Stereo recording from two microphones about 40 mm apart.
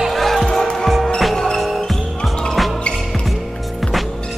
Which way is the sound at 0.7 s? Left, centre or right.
Centre.